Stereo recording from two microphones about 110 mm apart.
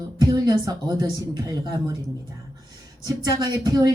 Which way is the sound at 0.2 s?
35° right (ahead or behind).